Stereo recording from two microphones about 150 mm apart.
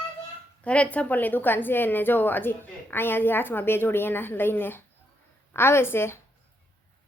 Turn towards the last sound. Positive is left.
turn(degrees=15)  # may be behind; listen again after turning